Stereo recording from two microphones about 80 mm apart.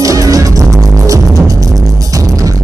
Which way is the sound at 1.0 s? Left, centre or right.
Right.